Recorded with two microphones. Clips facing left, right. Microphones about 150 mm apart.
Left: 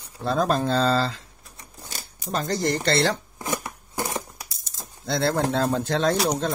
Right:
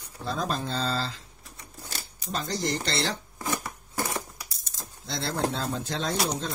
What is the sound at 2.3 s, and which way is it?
Speech, 55° left (ahead or behind).